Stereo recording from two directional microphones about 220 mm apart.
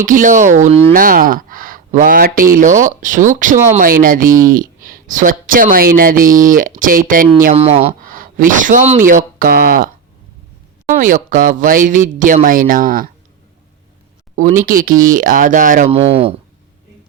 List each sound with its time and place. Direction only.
0.0 s speech: 35° right (ahead or behind)
14.3 s speech: 35° right (ahead or behind)
15.9 s speech: 25° right (ahead or behind)